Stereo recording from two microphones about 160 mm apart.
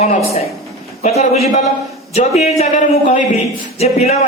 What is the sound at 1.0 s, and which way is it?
A woman's voice, 45° left (ahead or behind).